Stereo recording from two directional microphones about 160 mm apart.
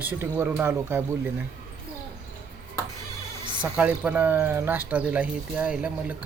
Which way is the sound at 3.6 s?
5° right (ahead or behind).